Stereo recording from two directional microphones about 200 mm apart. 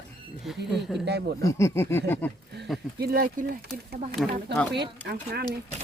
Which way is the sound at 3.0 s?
50° right (ahead or behind).